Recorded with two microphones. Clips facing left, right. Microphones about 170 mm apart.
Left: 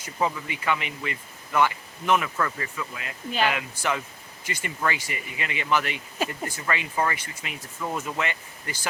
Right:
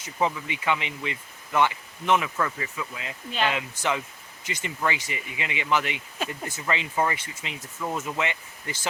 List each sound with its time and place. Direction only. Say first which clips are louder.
0.0 s speech: even; 20° right (ahead or behind)
7.8 s speech: even; 5° right (ahead or behind)
8.2 s speech: right 1 dB; 20° right (ahead or behind)